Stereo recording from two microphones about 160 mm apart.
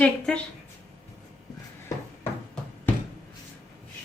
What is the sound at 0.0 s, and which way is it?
Speech, 5° left (ahead or behind).